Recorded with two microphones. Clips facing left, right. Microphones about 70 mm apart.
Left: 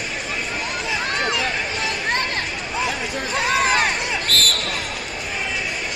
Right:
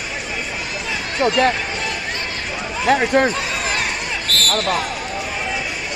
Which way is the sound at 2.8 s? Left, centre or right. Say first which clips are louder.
Right 15 dB; right.